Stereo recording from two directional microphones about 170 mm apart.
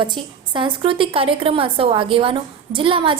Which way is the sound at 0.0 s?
30° right (ahead or behind).